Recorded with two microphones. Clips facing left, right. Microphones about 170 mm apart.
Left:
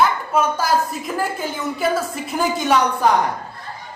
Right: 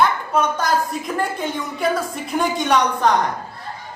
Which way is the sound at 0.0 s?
5° left (ahead or behind).